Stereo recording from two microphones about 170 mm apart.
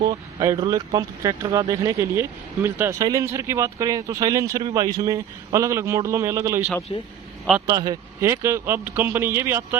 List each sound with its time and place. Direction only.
0.0 s speech: 25° right (ahead or behind)
6.9 s a man's voice: 25° left (ahead or behind)
7.7 s speech: 20° right (ahead or behind)